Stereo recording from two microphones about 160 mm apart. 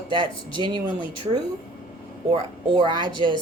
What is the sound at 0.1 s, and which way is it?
Speech, 30° right (ahead or behind).